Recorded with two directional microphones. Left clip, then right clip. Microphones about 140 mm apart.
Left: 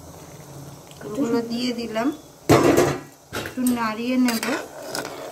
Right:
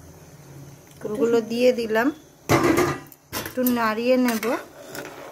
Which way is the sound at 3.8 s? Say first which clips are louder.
Right 7 dB; 90° right.